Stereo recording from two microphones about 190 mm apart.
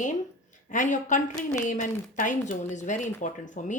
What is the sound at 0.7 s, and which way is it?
Speech, 40° left (ahead or behind).